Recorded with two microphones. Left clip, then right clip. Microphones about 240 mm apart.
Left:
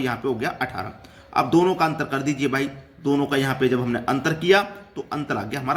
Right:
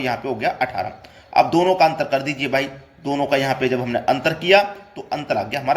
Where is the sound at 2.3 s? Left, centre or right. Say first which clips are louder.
Right 3 dB; centre.